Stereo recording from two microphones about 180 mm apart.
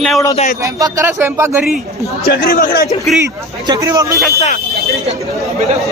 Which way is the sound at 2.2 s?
55° left (ahead or behind).